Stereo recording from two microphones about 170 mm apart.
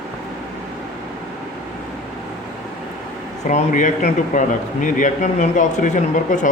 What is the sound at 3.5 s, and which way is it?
A man's voice, 45° left (ahead or behind).